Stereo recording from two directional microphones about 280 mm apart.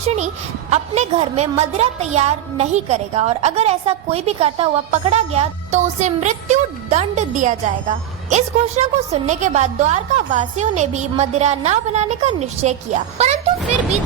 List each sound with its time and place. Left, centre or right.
0.0 s a woman's voice: right